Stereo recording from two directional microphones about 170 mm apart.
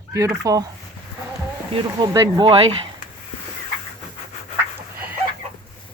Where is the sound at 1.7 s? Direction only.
25° right (ahead or behind).